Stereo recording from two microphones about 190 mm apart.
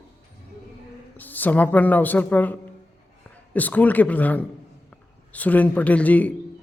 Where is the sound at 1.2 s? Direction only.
10° left (ahead or behind).